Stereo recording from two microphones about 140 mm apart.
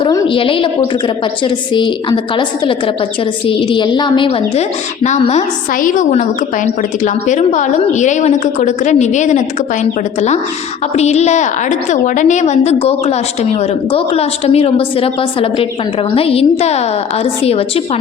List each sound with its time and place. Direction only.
0.3 s a woman's voice: 40° left (ahead or behind)
5.7 s a woman's voice: 70° left (ahead or behind)
10.9 s a woman's voice: 50° left (ahead or behind)